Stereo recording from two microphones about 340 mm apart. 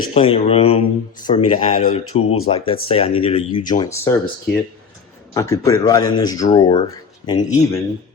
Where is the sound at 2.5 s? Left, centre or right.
Centre.